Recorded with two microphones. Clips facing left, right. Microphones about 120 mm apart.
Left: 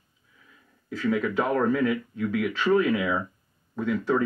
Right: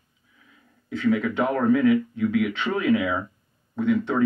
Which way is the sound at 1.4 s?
20° right (ahead or behind).